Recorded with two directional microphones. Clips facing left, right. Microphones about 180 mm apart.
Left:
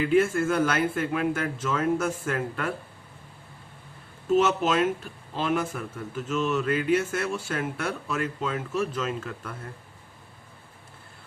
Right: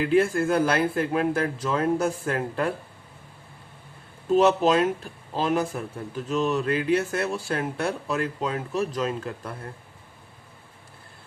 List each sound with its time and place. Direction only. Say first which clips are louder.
0.1 s speech: right 2 dB; 35° right (ahead or behind)
4.3 s speech: right 3 dB; 35° right (ahead or behind)